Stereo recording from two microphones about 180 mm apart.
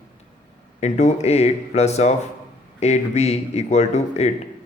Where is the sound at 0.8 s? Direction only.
40° left (ahead or behind).